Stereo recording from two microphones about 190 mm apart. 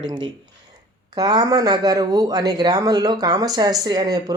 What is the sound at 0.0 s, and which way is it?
Speech, 25° right (ahead or behind).